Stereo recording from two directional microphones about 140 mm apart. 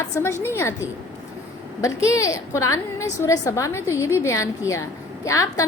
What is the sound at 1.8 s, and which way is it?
A woman's voice, 20° left (ahead or behind).